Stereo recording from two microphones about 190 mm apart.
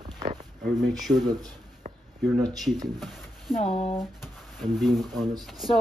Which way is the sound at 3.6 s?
30° left (ahead or behind).